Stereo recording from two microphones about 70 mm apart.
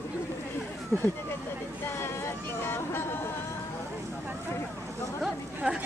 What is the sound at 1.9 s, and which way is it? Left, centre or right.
Vehicle, left.